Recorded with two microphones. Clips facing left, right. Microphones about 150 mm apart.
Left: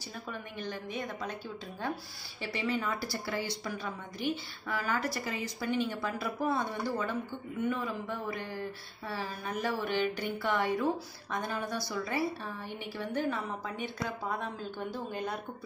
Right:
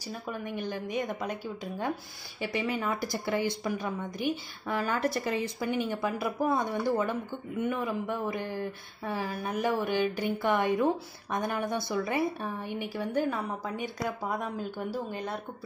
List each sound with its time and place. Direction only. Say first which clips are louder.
0.3 s speech: right 5 dB; 15° right (ahead or behind)
2.4 s a woman's voice: right 3 dB; 15° right (ahead or behind)
5.6 s a woman's voice: right 2 dB; 15° right (ahead or behind)